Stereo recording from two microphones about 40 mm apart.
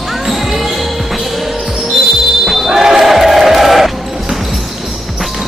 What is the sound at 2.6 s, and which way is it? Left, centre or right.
Basketball bounce, centre.